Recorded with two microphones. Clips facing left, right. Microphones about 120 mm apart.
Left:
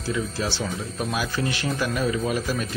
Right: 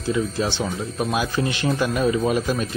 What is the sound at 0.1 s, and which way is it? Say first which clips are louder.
Speech: right 4 dB; 20° right (ahead or behind).